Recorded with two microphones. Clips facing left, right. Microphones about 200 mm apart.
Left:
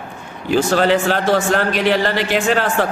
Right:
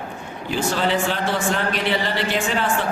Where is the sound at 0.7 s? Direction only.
90° left.